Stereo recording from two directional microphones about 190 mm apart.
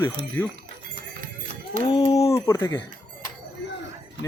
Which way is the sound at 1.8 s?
20° left (ahead or behind).